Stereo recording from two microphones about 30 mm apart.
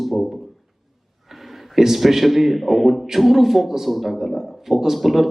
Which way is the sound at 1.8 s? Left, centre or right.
Centre.